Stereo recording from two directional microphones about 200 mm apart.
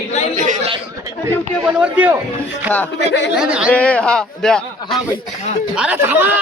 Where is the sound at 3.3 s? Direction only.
5° right (ahead or behind).